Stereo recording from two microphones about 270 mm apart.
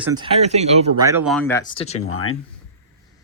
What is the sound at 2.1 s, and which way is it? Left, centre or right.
Speech, left.